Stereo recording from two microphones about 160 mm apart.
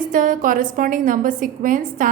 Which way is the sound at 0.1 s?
55° right (ahead or behind).